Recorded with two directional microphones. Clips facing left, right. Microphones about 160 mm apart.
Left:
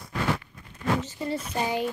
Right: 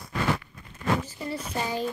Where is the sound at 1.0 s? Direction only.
25° left (ahead or behind).